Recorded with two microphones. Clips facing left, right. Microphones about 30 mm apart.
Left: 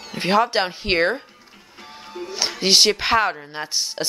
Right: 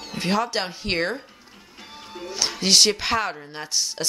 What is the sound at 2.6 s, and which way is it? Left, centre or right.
Speech, centre.